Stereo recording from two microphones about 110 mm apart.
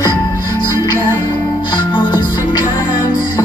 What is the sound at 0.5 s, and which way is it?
Music, 40° left (ahead or behind).